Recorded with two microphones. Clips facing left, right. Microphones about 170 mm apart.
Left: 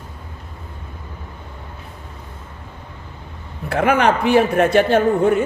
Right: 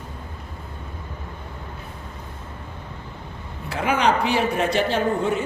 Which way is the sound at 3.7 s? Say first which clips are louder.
Left 5 dB; 55° left (ahead or behind).